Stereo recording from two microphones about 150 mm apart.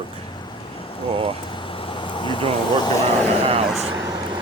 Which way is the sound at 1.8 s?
35° left (ahead or behind).